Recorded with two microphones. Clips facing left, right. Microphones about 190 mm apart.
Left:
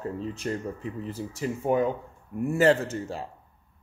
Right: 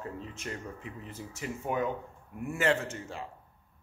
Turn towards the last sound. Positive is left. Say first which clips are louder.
# left 7 dB
turn(degrees=35)  # may be behind; listen again after turning